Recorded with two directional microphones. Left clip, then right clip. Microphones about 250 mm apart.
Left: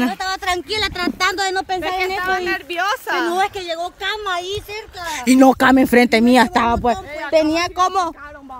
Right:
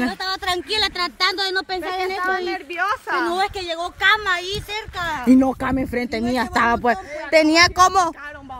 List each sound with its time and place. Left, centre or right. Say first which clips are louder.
0.0 s a sound: left 3 dB; centre
0.7 s speech: left 1 dB; centre
2.2 s speech: left 3 dB; left
3.3 s speech: left 3 dB; centre
4.0 s speech: right 8 dB; right
5.3 s speech: left 8 dB; left
6.5 s speech: left 1 dB; centre
7.2 s speech: right 2 dB; centre